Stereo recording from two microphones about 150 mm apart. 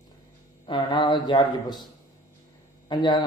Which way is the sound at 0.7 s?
30° left (ahead or behind).